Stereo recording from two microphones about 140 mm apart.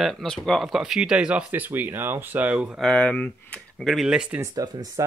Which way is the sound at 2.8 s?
5° left (ahead or behind).